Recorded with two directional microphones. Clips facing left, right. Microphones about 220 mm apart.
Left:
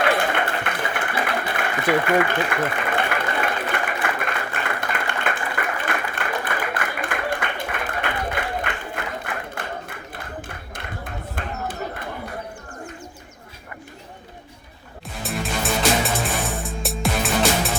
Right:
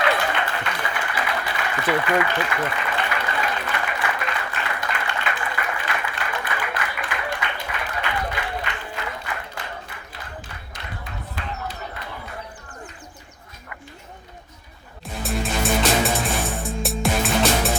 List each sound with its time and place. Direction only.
0.0 s applause: 55° left (ahead or behind)
5.8 s a sound: 50° left (ahead or behind)
15.2 s music: centre (ahead or behind)